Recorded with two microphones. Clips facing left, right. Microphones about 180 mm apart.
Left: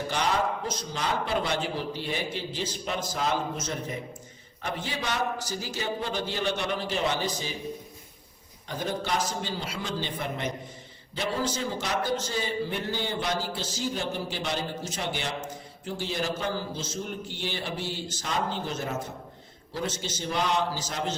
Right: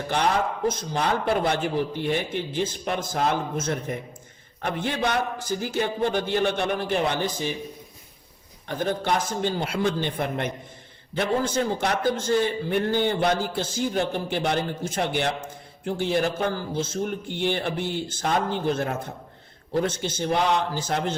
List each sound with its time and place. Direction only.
0.1 s a man's voice: 55° right (ahead or behind)
8.6 s a man's voice: 55° right (ahead or behind)